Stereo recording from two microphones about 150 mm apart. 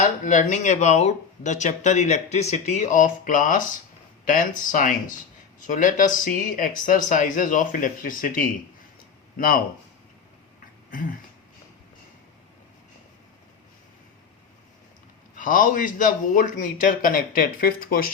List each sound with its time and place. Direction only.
0.0 s speech: 55° left (ahead or behind)
15.4 s speech: 65° left (ahead or behind)